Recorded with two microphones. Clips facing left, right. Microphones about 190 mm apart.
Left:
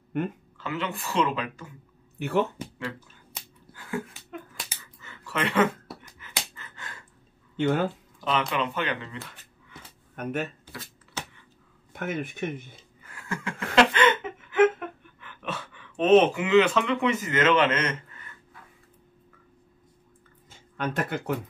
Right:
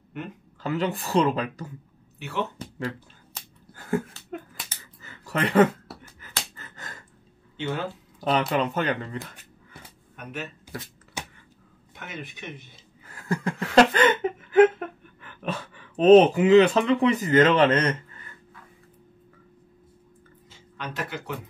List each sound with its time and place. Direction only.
0.6 s speech: 35° right (ahead or behind)
3.7 s a sound: 45° right (ahead or behind)
4.6 s finger snapping: centre (ahead or behind)
5.0 s a sound: 40° right (ahead or behind)
7.5 s speech: 50° left (ahead or behind)
8.2 s speech: 40° right (ahead or behind)
10.1 s speech: 50° left (ahead or behind)
11.2 s arrow: 15° right (ahead or behind)
11.9 s speech: 50° left (ahead or behind)
13.1 s a sound: 40° right (ahead or behind)
15.2 s speech: 35° right (ahead or behind)
20.5 s speech: 50° left (ahead or behind)